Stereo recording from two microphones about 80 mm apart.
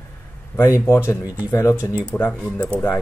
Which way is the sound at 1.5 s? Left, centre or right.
Left.